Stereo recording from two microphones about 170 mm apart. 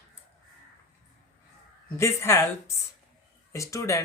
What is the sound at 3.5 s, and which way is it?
Speech, 20° left (ahead or behind).